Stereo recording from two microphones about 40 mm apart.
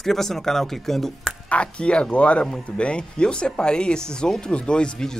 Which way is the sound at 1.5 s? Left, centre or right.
Left.